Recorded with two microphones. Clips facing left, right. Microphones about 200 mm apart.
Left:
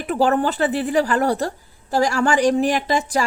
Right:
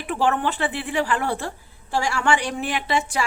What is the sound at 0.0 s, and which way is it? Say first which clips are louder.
Speech: left 4 dB; 40° left (ahead or behind).